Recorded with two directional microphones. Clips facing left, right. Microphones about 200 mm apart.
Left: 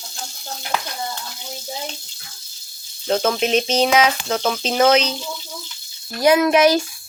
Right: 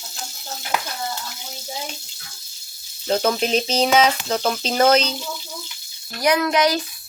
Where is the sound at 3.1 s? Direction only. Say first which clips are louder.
Left 1 dB; 5° right (ahead or behind).